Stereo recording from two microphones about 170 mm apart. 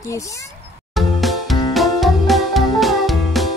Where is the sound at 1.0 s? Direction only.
Centre (ahead or behind).